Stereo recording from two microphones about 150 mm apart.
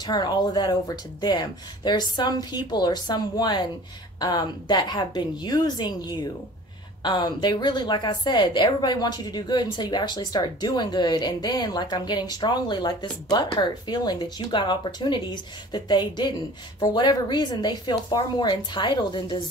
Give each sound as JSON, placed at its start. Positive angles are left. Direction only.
{"t": 0.0, "sound": "a woman's voice", "side_deg": 25}